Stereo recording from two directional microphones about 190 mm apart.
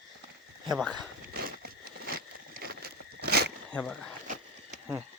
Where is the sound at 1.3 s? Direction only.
50° right (ahead or behind).